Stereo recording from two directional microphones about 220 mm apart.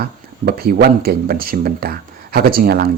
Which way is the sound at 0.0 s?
45° right (ahead or behind).